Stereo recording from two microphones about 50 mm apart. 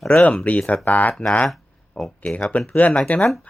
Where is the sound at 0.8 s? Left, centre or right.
Left.